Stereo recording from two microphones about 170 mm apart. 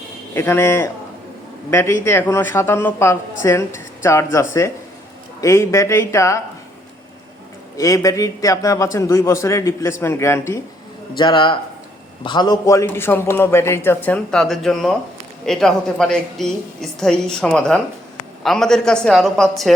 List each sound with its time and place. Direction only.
0.3 s a man's voice: 15° left (ahead or behind)
7.8 s a man's voice: 20° left (ahead or behind)
11.2 s a man's voice: 25° left (ahead or behind); by 19.7 s centre (ahead or behind)